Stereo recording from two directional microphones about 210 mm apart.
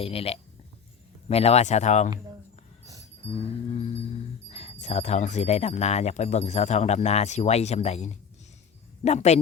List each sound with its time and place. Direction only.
0.0 s speech: 30° left (ahead or behind)
2.8 s dog: 15° right (ahead or behind)
3.2 s a sound: 30° left (ahead or behind)
4.5 s speech: 30° left (ahead or behind)